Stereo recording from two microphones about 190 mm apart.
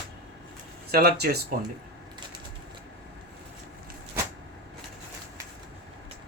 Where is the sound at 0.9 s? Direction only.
55° right (ahead or behind).